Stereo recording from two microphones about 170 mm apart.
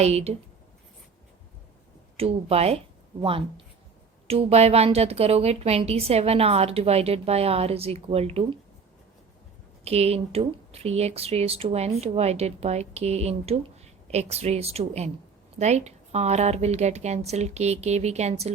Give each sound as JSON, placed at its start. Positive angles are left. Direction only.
{"t": 0.0, "sound": "a woman's voice", "side_deg": -40}
{"t": 2.1, "sound": "a woman's voice", "side_deg": -35}
{"t": 9.8, "sound": "a woman's voice", "side_deg": -40}